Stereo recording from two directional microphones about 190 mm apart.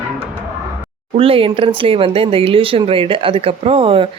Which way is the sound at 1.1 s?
30° right (ahead or behind).